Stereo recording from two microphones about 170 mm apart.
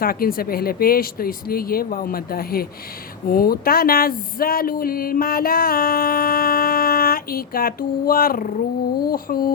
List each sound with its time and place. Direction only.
0.0 s speech: 60° left (ahead or behind)